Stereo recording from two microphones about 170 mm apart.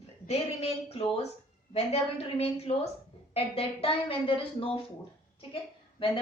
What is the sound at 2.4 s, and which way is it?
A woman's voice, 35° left (ahead or behind).